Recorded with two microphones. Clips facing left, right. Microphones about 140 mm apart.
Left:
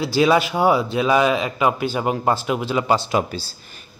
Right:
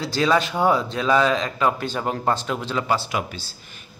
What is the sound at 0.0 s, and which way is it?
A man's voice, 10° left (ahead or behind).